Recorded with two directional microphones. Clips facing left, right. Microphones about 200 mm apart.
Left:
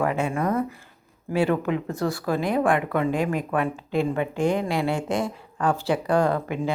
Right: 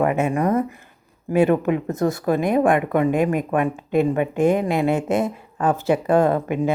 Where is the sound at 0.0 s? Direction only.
20° right (ahead or behind).